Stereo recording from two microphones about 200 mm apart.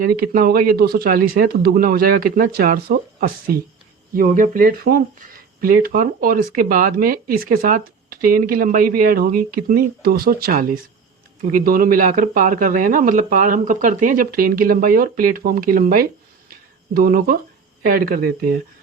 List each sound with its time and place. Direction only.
0.0 s speech: 45° right (ahead or behind)
16.5 s a sound: 45° right (ahead or behind)
17.8 s speech: 45° right (ahead or behind)